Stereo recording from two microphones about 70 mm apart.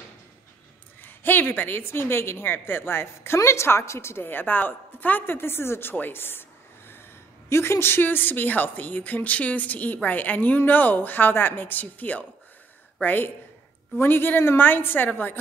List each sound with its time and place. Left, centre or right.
1.0 s a woman's voice: left
7.4 s a woman's voice: left